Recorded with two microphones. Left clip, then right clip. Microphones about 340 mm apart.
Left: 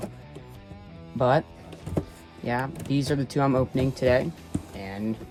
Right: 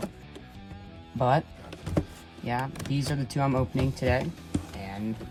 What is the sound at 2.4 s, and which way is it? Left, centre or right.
Speech, centre.